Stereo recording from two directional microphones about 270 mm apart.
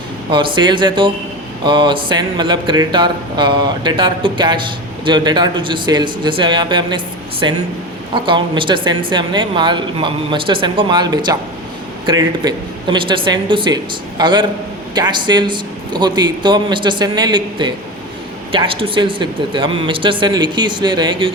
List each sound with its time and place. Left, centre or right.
0.3 s a woman's voice: centre